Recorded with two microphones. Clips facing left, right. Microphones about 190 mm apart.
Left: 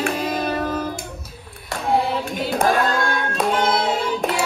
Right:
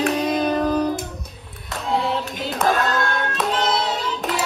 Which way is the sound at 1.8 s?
50° left (ahead or behind).